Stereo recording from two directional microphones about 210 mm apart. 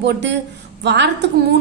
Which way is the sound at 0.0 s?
55° right (ahead or behind).